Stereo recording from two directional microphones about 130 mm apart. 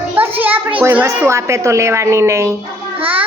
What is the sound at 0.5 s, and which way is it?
Speech, 10° right (ahead or behind).